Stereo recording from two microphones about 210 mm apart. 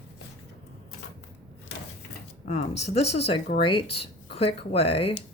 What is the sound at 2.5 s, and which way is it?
Speech, 30° left (ahead or behind).